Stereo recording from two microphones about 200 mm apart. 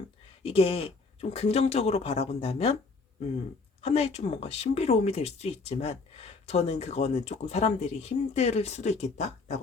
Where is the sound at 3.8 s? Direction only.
30° left (ahead or behind).